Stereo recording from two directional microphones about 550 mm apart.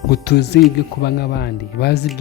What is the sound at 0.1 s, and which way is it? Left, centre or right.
Speech, centre.